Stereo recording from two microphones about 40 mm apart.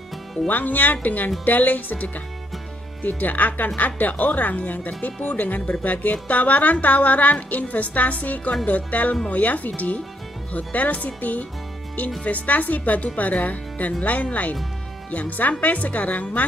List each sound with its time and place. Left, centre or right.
0.5 s a woman's voice: left